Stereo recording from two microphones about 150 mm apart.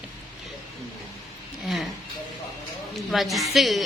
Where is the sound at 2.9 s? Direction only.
Centre (ahead or behind).